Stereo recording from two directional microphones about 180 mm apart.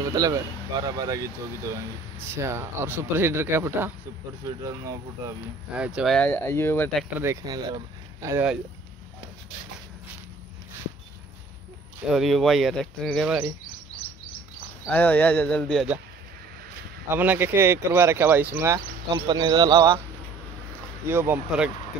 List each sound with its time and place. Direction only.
0.0 s speech: 20° right (ahead or behind)
2.2 s speech: 15° right (ahead or behind)
5.7 s speech: 5° right (ahead or behind); by 7.0 s 10° left (ahead or behind)
7.2 s speech: 20° right (ahead or behind)
12.1 s speech: centre (ahead or behind)
14.9 s speech: 10° left (ahead or behind)
17.1 s speech: 10° right (ahead or behind)
21.0 s speech: 10° right (ahead or behind)